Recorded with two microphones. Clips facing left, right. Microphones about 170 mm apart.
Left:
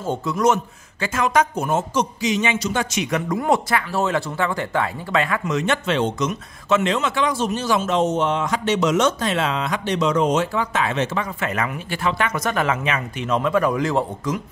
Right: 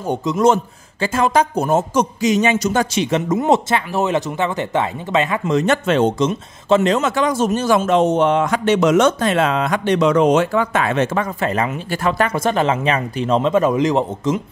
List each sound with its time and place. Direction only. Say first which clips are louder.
0.0 s speech: right 4 dB; 20° right (ahead or behind); by 6.1 s 40° right (ahead or behind)
6.1 s speech: right 5 dB; 30° right (ahead or behind); by 11.2 s 50° right (ahead or behind)
11.4 s speech: right 5 dB; 30° right (ahead or behind)
12.0 s speech: right 4 dB; 40° right (ahead or behind); by 14.4 s 20° right (ahead or behind)